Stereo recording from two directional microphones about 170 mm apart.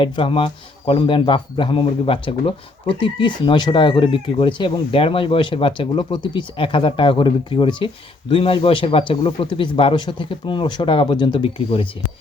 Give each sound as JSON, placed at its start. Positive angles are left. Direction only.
{"t": 0.0, "sound": "a man's voice", "side_deg": 30}